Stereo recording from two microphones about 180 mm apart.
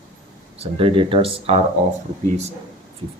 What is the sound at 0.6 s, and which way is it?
Speech, 30° right (ahead or behind).